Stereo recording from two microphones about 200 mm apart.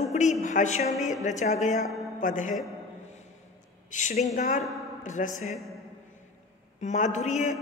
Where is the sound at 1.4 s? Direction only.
35° left (ahead or behind).